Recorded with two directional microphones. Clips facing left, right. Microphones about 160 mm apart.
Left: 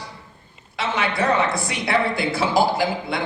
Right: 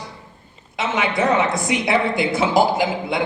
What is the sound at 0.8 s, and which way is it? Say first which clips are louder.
A woman's voice: right 2 dB; 20° right (ahead or behind).